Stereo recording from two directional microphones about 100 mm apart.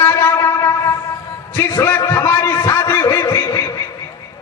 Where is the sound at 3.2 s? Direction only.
30° left (ahead or behind).